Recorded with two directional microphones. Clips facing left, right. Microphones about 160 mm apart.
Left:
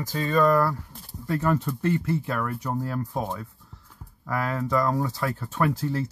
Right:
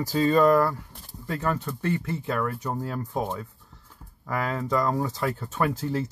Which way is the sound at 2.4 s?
5° right (ahead or behind).